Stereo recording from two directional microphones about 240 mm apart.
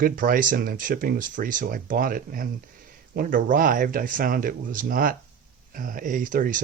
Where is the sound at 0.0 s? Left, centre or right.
Right.